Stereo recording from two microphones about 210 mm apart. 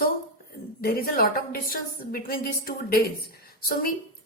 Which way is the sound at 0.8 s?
45° left (ahead or behind).